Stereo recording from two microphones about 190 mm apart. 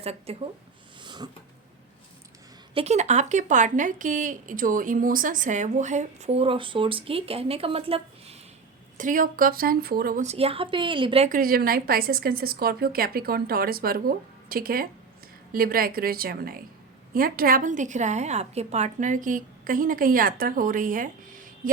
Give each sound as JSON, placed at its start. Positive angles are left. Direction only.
{"t": 0.0, "sound": "speech", "side_deg": -30}
{"t": 1.0, "sound": "cat", "side_deg": -25}
{"t": 2.7, "sound": "speech", "side_deg": -35}
{"t": 9.0, "sound": "a woman's voice", "side_deg": -45}
{"t": 10.2, "sound": "a woman's voice", "side_deg": -30}
{"t": 11.3, "sound": "a woman's voice", "side_deg": -50}